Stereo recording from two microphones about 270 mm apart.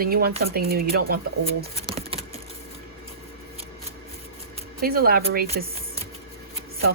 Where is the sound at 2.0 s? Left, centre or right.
Right.